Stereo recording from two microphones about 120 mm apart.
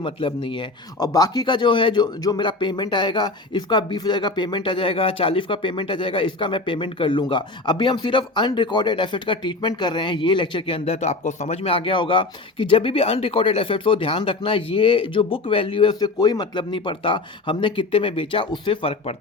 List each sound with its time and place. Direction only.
0.0 s speech: 50° left (ahead or behind)